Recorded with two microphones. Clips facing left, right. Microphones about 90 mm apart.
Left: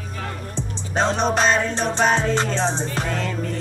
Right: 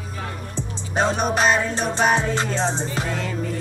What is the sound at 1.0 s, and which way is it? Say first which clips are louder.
Music: left 1 dB; 10° right (ahead or behind).